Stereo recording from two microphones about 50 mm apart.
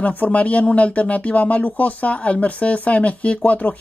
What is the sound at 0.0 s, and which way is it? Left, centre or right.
Speech, left.